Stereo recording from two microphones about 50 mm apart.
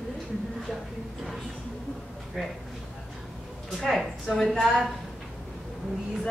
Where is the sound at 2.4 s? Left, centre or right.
Centre.